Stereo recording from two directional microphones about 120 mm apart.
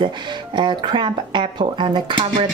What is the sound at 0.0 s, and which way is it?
A woman's voice, 40° right (ahead or behind).